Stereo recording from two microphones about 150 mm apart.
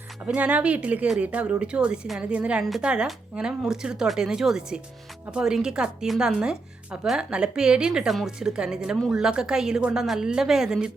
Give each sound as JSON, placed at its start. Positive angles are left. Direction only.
{"t": 0.3, "sound": "speech", "side_deg": -10}